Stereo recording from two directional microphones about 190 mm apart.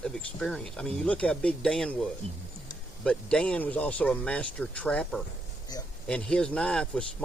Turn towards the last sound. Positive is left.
turn(degrees=5)  # may be behind; listen again after turning